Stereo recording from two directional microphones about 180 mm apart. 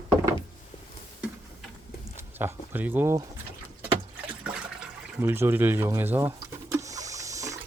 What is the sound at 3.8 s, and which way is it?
Water, 5° right (ahead or behind).